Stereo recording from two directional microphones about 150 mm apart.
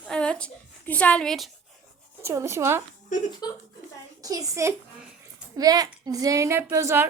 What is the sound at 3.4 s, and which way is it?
Speech, 25° left (ahead or behind).